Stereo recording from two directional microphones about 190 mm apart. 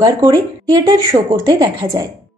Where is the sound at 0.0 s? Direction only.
20° right (ahead or behind).